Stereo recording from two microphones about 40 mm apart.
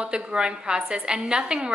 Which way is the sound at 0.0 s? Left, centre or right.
Right.